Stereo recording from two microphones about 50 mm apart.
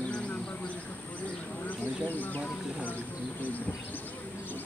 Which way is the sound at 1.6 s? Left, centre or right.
Left.